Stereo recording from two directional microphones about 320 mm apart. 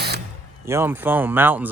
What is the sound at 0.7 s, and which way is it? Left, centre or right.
Speech, centre.